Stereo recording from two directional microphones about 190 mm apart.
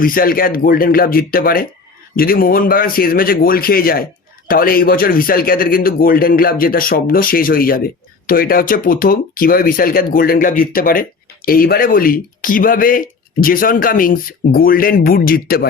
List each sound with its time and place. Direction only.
0.0 s speech: 50° left (ahead or behind)